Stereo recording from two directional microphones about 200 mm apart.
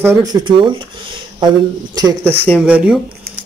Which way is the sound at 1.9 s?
15° right (ahead or behind).